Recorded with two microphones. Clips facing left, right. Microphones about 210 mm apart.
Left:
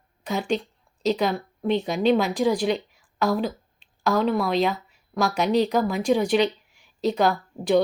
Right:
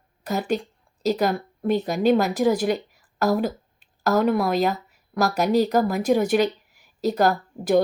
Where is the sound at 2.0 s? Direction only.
5° right (ahead or behind).